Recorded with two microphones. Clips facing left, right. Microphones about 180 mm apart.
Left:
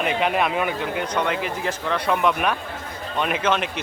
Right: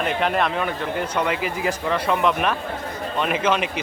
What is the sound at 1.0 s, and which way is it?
Speech, 5° right (ahead or behind).